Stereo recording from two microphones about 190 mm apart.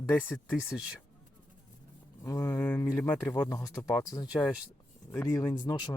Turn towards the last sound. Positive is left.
turn(degrees=20)  # may be behind; listen again after turning